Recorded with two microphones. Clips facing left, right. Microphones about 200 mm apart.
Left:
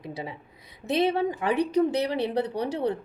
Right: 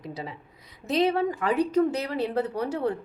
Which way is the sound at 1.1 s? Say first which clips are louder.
Even; 25° left (ahead or behind).